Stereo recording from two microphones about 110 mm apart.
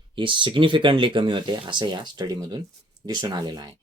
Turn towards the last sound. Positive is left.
turn(degrees=-40)  # may be behind; listen again after turning